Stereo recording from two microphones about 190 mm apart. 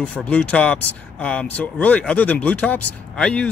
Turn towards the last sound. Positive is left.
turn(degrees=5)  # may be behind; listen again after turning